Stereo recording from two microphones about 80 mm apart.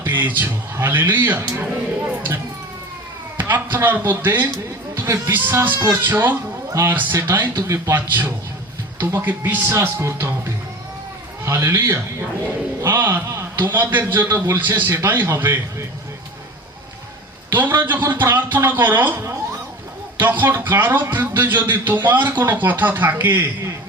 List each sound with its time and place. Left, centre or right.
0.0 s a man's voice: right
2.0 s a sound: right
3.3 s a man's voice: right
4.9 s a sound: right
5.3 s a man's voice: right
8.0 s a man's voice: right
9.7 s a man's voice: right
17.5 s a man's voice: right
20.1 s a man's voice: right